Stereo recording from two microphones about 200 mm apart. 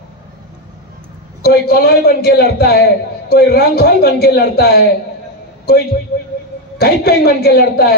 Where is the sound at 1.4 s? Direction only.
50° left (ahead or behind).